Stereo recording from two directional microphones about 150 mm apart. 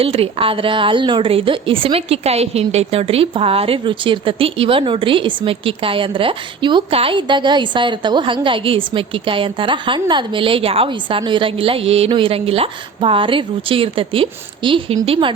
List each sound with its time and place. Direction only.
0.0 s a woman's voice: 40° right (ahead or behind)